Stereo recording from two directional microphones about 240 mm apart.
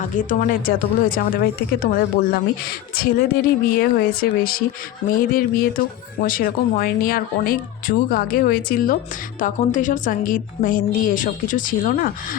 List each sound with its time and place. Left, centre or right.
0.0 s a woman's voice: left